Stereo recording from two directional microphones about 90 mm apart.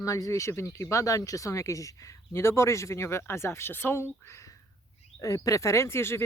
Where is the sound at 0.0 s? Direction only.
40° left (ahead or behind).